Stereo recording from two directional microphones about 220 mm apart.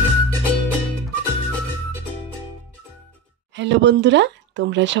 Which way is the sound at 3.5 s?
55° right (ahead or behind).